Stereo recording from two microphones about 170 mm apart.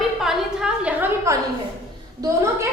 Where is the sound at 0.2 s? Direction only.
5° right (ahead or behind).